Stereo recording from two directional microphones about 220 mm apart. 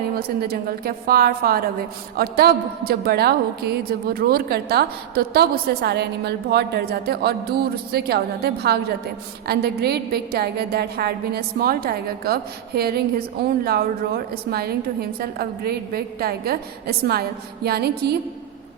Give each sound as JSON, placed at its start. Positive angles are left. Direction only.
{"t": 0.2, "sound": "a woman's voice", "side_deg": -45}